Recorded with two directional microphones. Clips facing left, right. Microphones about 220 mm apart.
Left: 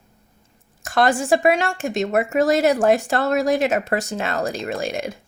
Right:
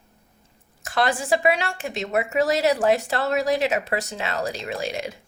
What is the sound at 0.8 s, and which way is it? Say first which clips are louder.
Speech: left 5 dB; 45° left (ahead or behind).